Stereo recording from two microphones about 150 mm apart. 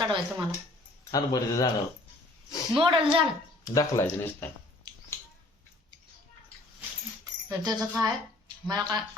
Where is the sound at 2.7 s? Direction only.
35° right (ahead or behind).